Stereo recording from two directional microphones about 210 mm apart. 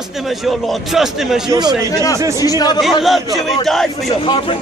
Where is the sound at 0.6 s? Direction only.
Centre (ahead or behind).